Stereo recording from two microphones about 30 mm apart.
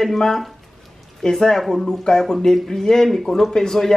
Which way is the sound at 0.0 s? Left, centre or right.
Centre.